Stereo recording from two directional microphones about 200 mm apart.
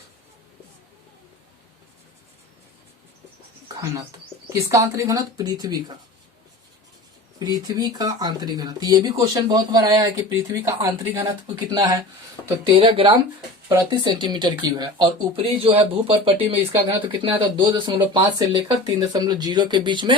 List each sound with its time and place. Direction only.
4.4 s speech: 15° right (ahead or behind)
7.3 s speech: 20° right (ahead or behind)